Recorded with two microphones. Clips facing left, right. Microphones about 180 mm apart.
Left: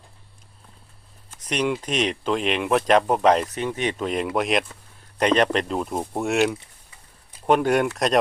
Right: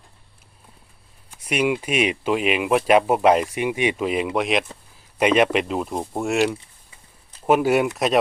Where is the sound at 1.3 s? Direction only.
10° right (ahead or behind).